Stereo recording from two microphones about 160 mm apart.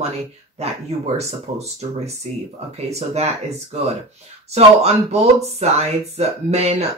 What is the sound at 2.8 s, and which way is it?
Speech, 40° right (ahead or behind).